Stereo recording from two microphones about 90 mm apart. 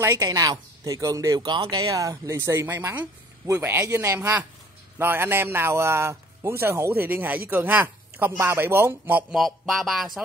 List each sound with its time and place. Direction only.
0.0 s speech: 35° right (ahead or behind)
1.4 s a man's voice: 55° right (ahead or behind); by 9.2 s 25° right (ahead or behind)
9.3 s speech: centre (ahead or behind)